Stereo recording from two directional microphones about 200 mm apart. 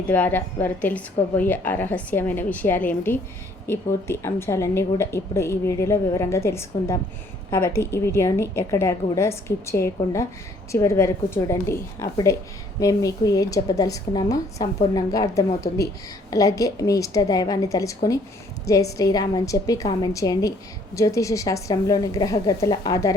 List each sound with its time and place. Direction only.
0.1 s a woman's voice: 10° left (ahead or behind)